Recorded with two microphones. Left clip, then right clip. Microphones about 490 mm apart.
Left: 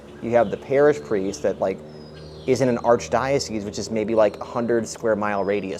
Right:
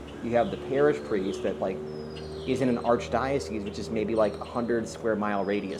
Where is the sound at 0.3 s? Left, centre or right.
Left.